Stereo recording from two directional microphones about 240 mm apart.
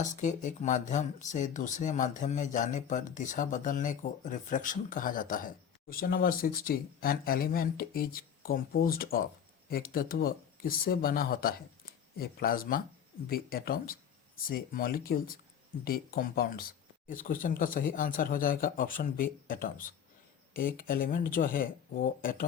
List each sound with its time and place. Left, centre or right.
0.0 s speech: left